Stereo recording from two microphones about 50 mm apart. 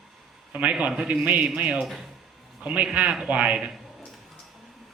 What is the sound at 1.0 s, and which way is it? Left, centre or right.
A man's voice, right.